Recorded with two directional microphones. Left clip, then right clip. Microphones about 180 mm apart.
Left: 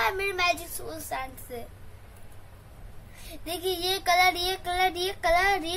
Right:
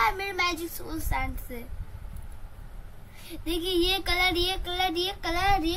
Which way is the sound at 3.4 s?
30° left (ahead or behind).